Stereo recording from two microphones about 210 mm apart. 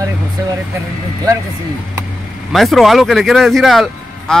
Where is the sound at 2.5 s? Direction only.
Centre (ahead or behind).